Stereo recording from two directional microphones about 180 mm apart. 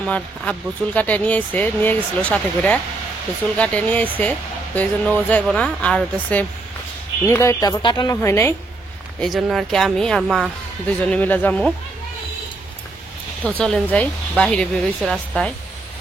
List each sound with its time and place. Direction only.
0.0 s speech: 5° left (ahead or behind)
9.2 s speech: centre (ahead or behind)
11.1 s speech: 10° left (ahead or behind)
13.6 s speech: 5° left (ahead or behind)